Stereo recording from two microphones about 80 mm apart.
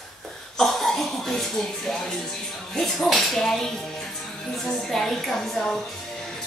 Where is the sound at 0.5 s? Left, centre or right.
Centre.